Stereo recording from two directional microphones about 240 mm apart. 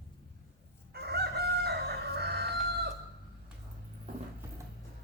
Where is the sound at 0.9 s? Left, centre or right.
Right.